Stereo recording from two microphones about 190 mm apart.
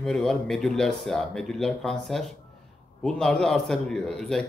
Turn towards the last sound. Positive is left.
turn(degrees=5)  # may be behind; listen again after turning